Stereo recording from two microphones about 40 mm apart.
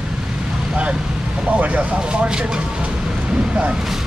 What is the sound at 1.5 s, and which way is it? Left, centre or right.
Speech, right.